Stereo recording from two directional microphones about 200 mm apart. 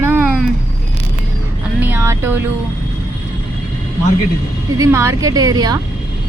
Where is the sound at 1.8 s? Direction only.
10° right (ahead or behind).